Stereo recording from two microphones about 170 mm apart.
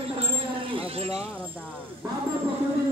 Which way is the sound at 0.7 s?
35° right (ahead or behind).